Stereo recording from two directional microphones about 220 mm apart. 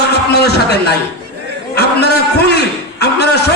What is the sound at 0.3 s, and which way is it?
Speech, 45° left (ahead or behind).